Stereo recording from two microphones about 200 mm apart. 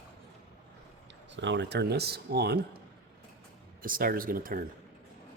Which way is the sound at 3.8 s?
45° right (ahead or behind).